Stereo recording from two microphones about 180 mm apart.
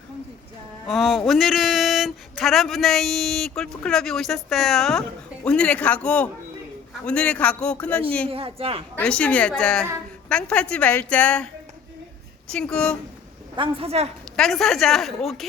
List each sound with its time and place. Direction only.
0.9 s a man's voice: centre (ahead or behind)
8.3 s speech: 30° right (ahead or behind)
9.0 s a woman's voice: 5° left (ahead or behind)
12.5 s a woman's voice: 5° left (ahead or behind)
13.6 s speech: 30° right (ahead or behind)
14.3 s a woman's voice: centre (ahead or behind)